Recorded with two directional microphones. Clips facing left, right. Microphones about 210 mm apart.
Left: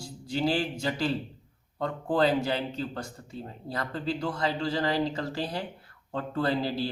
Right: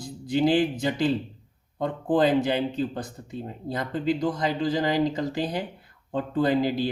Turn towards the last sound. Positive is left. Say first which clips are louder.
# right 5 dB
turn(degrees=-15)  # may be behind; listen again after turning